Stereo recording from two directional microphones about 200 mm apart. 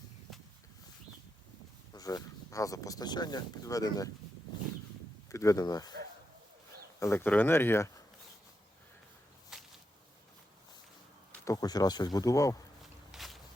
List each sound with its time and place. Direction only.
1.9 s speech: 20° left (ahead or behind)
5.3 s speech: 15° left (ahead or behind)
7.0 s speech: 10° left (ahead or behind)
9.5 s a sound: centre (ahead or behind)
11.3 s speech: 15° left (ahead or behind)
12.8 s walk: centre (ahead or behind)